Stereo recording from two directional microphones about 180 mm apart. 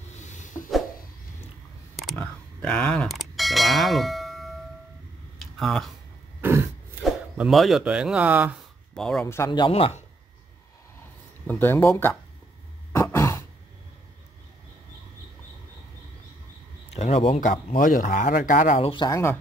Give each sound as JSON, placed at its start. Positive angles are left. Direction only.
{"t": 0.2, "sound": "a sound", "side_deg": 45}
{"t": 2.1, "sound": "a sound", "side_deg": 5}
{"t": 5.6, "sound": "speech", "side_deg": 0}
{"t": 6.4, "sound": "throat clearing", "side_deg": -15}
{"t": 7.3, "sound": "speech", "side_deg": 0}
{"t": 8.9, "sound": "speech", "side_deg": 5}
{"t": 9.2, "sound": "speech", "side_deg": 15}
{"t": 9.5, "sound": "speech", "side_deg": 30}
{"t": 11.0, "sound": "a sound", "side_deg": 10}
{"t": 12.9, "sound": "sigh", "side_deg": 15}
{"t": 16.9, "sound": "speech", "side_deg": 35}
{"t": 17.4, "sound": "speech", "side_deg": 45}